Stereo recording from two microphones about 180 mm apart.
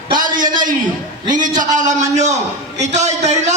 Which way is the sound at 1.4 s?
45° right (ahead or behind).